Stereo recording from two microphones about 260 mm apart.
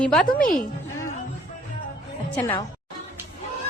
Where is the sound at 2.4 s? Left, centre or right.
Centre.